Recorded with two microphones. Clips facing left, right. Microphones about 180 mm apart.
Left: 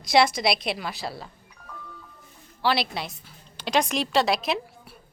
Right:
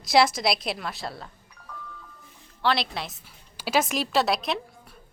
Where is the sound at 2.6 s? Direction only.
5° left (ahead or behind).